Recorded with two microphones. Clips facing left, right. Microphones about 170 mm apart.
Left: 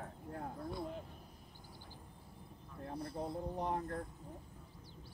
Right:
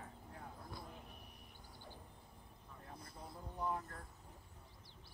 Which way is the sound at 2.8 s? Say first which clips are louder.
Left 13 dB; 60° left (ahead or behind).